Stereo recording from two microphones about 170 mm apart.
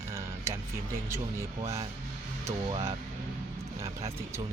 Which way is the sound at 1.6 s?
35° right (ahead or behind).